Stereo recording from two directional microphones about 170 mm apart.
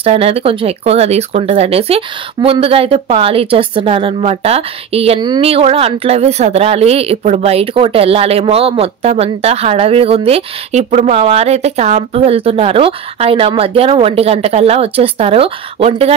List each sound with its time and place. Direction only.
0.0 s speech: 35° right (ahead or behind)